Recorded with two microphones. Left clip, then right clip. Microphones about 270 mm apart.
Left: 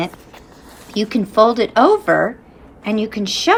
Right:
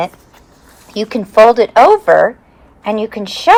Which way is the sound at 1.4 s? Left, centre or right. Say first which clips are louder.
Right 7 dB; right.